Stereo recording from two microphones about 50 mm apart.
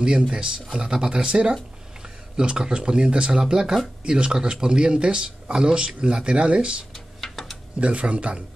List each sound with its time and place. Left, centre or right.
0.3 s speech: centre
6.9 s a sound: centre
7.8 s speech: right